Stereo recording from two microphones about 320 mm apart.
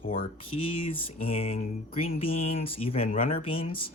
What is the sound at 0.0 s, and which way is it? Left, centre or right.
Speech, left.